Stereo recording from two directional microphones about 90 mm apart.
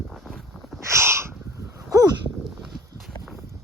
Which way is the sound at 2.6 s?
5° right (ahead or behind).